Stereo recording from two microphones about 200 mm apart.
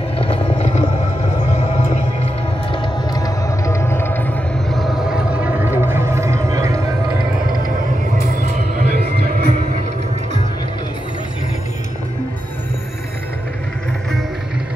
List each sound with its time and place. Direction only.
0.2 s clip-clop: 30° left (ahead or behind)
2.7 s music: 20° left (ahead or behind); by 6.8 s 15° right (ahead or behind)
8.9 s music: 50° right (ahead or behind)